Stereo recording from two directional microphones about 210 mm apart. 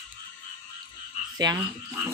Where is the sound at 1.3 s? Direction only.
20° right (ahead or behind).